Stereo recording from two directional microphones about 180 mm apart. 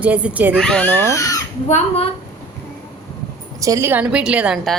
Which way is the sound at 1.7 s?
35° left (ahead or behind).